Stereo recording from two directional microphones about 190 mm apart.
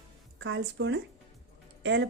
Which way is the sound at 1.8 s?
70° right (ahead or behind).